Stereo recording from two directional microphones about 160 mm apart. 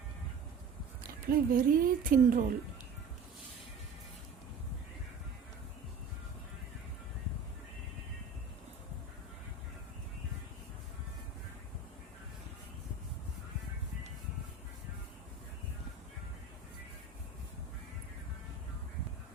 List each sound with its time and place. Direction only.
1.0 s speech: 65° right (ahead or behind)